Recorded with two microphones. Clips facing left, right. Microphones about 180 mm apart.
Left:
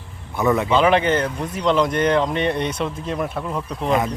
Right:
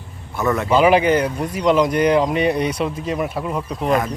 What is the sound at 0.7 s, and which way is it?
Speech, 5° right (ahead or behind).